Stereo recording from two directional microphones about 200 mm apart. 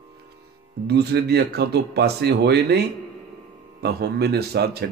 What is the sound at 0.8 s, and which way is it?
Speech, 55° right (ahead or behind).